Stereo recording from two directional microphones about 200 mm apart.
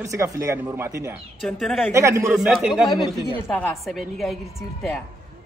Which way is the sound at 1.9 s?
15° right (ahead or behind).